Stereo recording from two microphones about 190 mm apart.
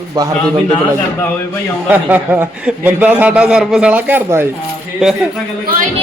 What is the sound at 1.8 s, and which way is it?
A man's voice, 10° right (ahead or behind).